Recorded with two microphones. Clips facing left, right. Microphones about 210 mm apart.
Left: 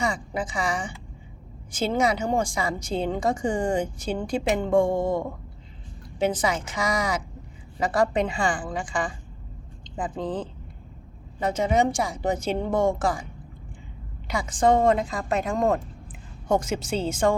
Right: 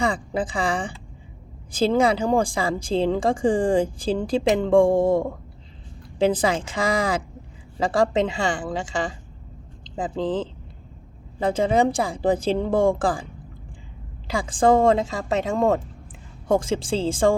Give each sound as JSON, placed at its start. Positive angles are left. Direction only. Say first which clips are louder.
{"t": 0.0, "sound": "a woman's voice", "louder": "right 4 dB", "side_deg": -35}
{"t": 9.8, "sound": "a sound", "louder": "right 2 dB", "side_deg": -25}
{"t": 10.2, "sound": "speech", "louder": "right 6 dB", "side_deg": -90}
{"t": 11.3, "sound": "a woman's voice", "louder": "right 3 dB", "side_deg": -30}
{"t": 14.3, "sound": "a woman's voice", "louder": "right 3 dB", "side_deg": -30}